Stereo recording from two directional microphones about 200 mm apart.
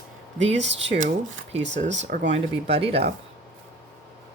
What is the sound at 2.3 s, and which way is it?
Speech, 35° right (ahead or behind).